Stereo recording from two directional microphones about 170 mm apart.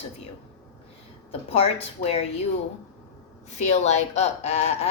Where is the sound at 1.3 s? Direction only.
35° left (ahead or behind).